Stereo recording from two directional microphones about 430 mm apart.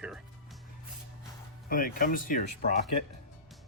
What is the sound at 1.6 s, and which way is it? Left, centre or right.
Speech, centre.